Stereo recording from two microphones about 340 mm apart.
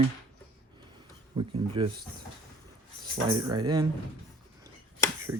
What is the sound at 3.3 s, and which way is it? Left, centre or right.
Speech, centre.